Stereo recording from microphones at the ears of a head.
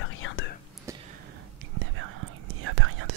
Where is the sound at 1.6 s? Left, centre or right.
Right.